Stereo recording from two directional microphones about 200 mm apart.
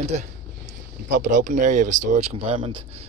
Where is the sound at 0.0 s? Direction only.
35° right (ahead or behind).